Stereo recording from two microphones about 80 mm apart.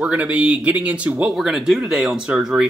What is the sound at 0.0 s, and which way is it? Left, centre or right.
Speech, centre.